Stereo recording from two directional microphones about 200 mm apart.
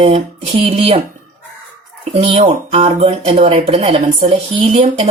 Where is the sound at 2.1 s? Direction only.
30° right (ahead or behind).